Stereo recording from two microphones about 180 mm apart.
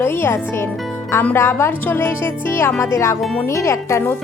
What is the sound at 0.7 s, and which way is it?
Music, centre (ahead or behind).